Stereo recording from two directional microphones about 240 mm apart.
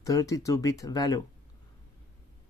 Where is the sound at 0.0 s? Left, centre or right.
Centre.